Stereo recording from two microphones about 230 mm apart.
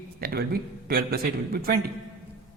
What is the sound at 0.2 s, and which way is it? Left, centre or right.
A man's voice, right.